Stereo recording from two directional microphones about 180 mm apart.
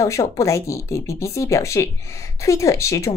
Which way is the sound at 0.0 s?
15° left (ahead or behind).